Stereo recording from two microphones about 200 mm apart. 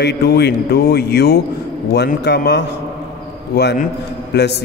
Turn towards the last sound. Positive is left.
turn(degrees=55)  # may be behind; listen again after turning